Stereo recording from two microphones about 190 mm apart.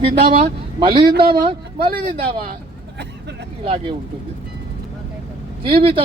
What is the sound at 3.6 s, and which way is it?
Speech, 25° right (ahead or behind).